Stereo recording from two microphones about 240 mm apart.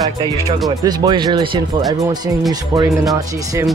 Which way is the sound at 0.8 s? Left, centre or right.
Centre.